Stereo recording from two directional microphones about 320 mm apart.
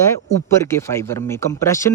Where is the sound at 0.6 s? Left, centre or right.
Centre.